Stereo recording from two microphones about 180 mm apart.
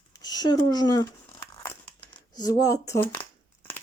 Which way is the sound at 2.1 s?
20° left (ahead or behind).